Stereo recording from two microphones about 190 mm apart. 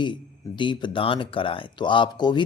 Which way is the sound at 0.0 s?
25° left (ahead or behind).